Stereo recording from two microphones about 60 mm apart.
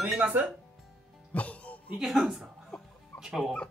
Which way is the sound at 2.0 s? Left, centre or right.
Centre.